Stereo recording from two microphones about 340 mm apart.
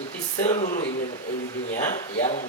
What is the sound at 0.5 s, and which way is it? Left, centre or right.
Speech, left.